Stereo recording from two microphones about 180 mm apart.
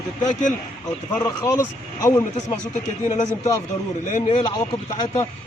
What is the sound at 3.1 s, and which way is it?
Speech, 40° left (ahead or behind).